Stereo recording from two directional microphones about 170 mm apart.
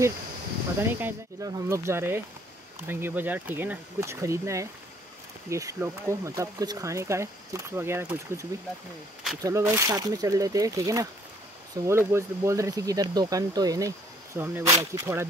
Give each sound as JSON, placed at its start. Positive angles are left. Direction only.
{"t": 0.9, "sound": "speech", "side_deg": -15}